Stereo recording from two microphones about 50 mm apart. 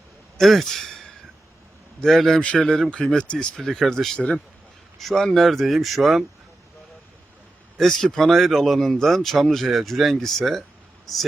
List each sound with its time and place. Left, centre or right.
0.3 s speech: centre
2.0 s speech: centre
7.8 s speech: centre